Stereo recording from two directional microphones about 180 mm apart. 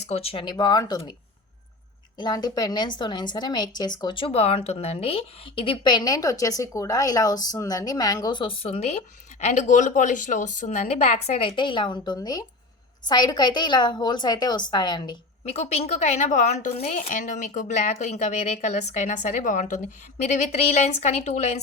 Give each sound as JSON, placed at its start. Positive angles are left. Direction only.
{"t": 0.0, "sound": "speech", "side_deg": 35}
{"t": 2.1, "sound": "speech", "side_deg": 25}
{"t": 15.5, "sound": "a woman's voice", "side_deg": 35}